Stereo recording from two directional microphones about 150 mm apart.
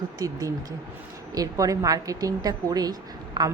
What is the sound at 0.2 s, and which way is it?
Speech, 25° right (ahead or behind).